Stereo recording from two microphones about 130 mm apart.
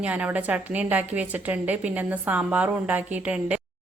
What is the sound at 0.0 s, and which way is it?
A woman's voice, 10° right (ahead or behind).